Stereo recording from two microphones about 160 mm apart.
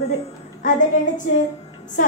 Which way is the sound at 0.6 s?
55° left (ahead or behind).